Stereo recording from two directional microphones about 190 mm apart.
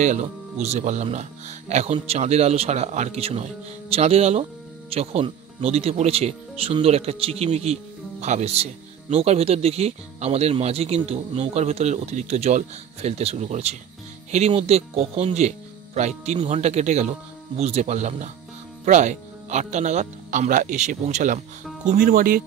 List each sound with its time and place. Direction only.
0.0 s speech: 40° right (ahead or behind)